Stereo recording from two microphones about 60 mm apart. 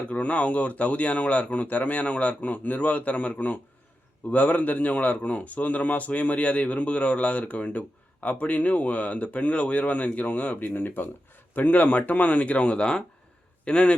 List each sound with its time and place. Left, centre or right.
0.1 s a man's voice: left